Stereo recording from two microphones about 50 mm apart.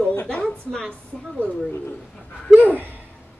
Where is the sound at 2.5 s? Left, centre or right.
Centre.